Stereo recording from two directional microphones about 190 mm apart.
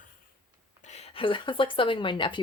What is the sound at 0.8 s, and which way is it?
Speech, 35° left (ahead or behind).